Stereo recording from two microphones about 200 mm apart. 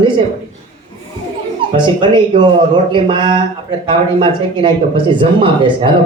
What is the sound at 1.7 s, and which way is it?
Speech, 25° right (ahead or behind).